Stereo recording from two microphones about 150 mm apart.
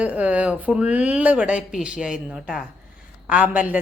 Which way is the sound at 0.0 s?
10° right (ahead or behind).